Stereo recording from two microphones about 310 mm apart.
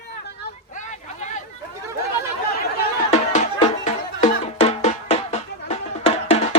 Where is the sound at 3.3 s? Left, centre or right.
Left.